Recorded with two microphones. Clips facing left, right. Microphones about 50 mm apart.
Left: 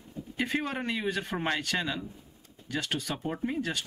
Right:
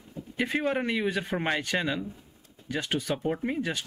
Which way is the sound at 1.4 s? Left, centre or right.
Centre.